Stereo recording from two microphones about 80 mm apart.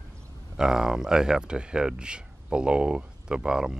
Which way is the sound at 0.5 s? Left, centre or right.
Centre.